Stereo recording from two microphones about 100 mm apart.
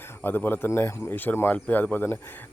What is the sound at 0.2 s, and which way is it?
Speech, 20° left (ahead or behind).